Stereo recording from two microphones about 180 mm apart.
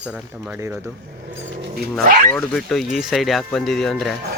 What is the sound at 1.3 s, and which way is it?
Speech, 80° right.